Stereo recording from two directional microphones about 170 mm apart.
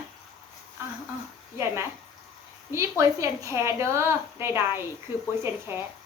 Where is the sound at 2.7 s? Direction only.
15° right (ahead or behind).